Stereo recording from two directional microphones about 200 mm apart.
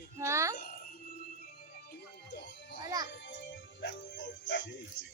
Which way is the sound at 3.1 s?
65° left (ahead or behind).